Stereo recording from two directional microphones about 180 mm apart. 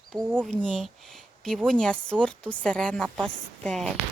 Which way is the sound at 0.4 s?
5° left (ahead or behind).